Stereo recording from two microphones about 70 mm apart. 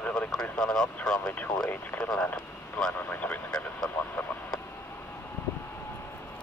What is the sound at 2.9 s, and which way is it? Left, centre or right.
Speech, left.